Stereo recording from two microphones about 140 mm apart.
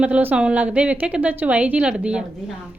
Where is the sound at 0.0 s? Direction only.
10° right (ahead or behind).